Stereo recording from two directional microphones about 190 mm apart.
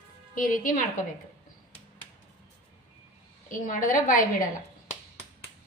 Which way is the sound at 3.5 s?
45° left (ahead or behind).